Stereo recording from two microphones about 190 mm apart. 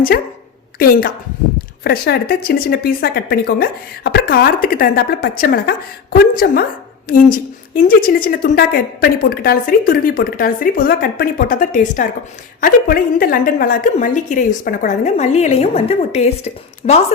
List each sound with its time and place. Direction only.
0.8 s a woman's voice: 50° left (ahead or behind); by 17.0 s 35° left (ahead or behind)